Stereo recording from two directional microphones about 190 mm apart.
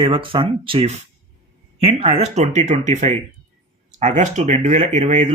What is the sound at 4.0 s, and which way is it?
Speech, 40° right (ahead or behind).